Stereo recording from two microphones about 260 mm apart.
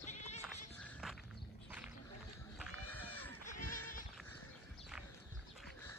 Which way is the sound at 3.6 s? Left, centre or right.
Left.